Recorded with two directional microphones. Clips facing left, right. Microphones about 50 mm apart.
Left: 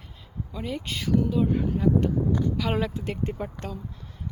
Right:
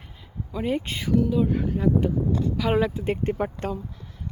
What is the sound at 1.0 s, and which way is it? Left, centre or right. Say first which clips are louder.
Speech: right 1 dB; centre.